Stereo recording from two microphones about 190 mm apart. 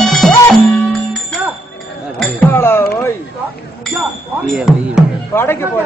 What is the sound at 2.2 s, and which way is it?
Music, 10° left (ahead or behind).